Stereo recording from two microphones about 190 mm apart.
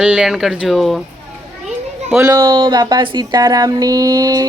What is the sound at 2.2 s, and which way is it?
Speech, 15° right (ahead or behind).